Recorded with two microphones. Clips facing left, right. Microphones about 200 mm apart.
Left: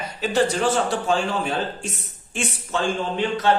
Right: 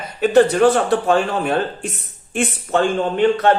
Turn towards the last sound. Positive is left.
turn(degrees=-55)  # may be behind; listen again after turning